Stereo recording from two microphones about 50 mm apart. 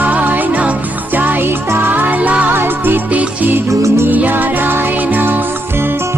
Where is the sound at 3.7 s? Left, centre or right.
Right.